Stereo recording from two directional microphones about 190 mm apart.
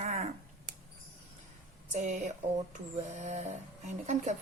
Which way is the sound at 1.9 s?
40° right (ahead or behind).